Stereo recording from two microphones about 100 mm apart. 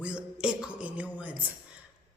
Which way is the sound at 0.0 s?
10° right (ahead or behind).